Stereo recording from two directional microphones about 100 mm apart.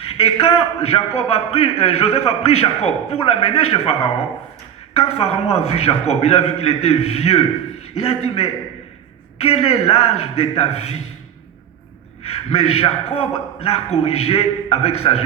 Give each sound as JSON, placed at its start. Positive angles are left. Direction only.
{"t": 0.0, "sound": "a man's voice", "side_deg": 70}
{"t": 3.1, "sound": "a man's voice", "side_deg": 70}
{"t": 4.9, "sound": "a man's voice", "side_deg": 90}
{"t": 7.9, "sound": "a man's voice", "side_deg": 80}
{"t": 12.2, "sound": "a man's voice", "side_deg": 80}